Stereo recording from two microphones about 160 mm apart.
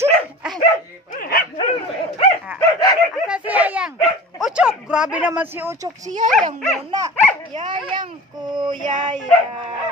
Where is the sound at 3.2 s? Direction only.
10° right (ahead or behind).